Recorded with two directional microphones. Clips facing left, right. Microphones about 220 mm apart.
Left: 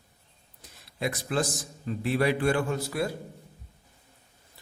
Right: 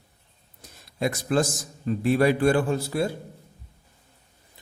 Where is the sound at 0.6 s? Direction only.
40° right (ahead or behind).